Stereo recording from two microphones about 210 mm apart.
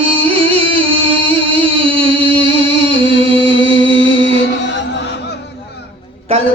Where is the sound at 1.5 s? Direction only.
25° right (ahead or behind).